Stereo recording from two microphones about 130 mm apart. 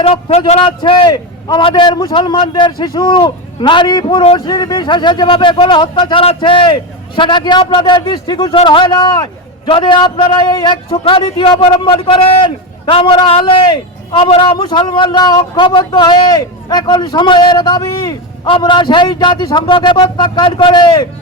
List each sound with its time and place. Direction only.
0.0 s speech: 50° left (ahead or behind)
0.8 s a man's voice: 40° left (ahead or behind)
4.4 s a man's voice: 35° left (ahead or behind)